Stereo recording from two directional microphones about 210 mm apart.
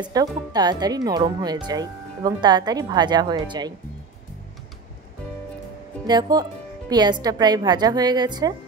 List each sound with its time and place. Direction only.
0.0 s speech: 20° right (ahead or behind)
6.0 s speech: 20° right (ahead or behind)